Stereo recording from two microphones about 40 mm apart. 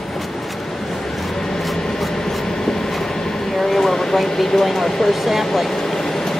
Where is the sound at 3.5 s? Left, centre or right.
Centre.